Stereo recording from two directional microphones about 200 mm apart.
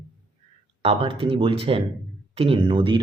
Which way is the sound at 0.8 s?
30° right (ahead or behind).